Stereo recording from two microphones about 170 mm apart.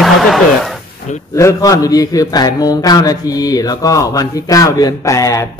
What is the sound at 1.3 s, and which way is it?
A man's voice, 20° left (ahead or behind).